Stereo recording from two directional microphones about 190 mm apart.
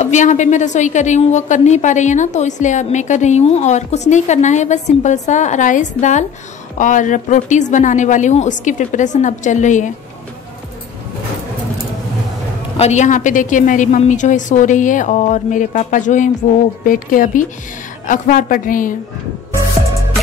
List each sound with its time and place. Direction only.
0.0 s a woman's voice: 40° left (ahead or behind)
12.7 s a woman's voice: 35° left (ahead or behind)